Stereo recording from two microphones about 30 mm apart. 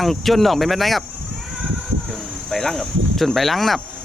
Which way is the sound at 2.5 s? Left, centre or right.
Centre.